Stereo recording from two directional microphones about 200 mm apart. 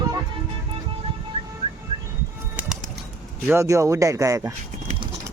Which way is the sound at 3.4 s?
10° right (ahead or behind).